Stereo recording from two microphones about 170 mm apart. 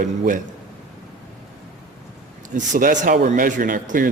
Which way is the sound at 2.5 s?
45° right (ahead or behind).